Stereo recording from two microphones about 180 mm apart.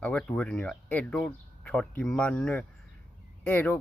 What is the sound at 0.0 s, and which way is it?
Speech, 5° left (ahead or behind).